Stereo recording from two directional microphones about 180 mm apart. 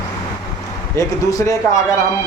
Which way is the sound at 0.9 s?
20° left (ahead or behind).